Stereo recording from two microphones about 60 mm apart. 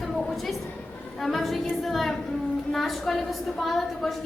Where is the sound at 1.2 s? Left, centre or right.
Centre.